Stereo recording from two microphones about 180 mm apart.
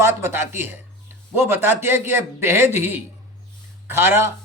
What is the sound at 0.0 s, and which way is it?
A man's voice, 15° right (ahead or behind).